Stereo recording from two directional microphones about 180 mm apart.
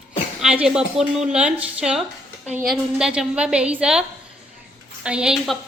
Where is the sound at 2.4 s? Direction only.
40° right (ahead or behind).